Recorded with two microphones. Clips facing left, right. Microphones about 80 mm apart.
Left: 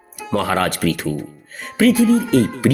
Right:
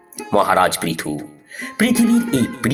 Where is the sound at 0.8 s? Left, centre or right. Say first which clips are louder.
Left 3 dB; right.